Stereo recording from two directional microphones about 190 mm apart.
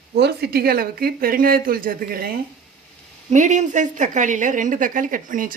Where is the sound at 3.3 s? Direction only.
40° right (ahead or behind).